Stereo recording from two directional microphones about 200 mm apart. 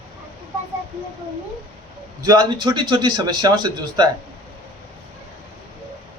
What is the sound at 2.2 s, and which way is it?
A man's voice, 20° right (ahead or behind).